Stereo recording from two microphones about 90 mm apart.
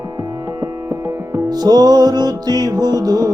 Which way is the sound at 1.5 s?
50° right (ahead or behind).